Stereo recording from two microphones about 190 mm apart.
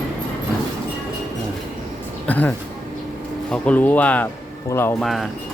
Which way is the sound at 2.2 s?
10° left (ahead or behind).